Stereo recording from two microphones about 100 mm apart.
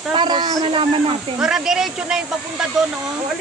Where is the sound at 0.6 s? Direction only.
60° right (ahead or behind).